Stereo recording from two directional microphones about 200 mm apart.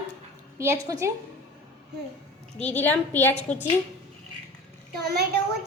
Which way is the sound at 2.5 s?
10° left (ahead or behind).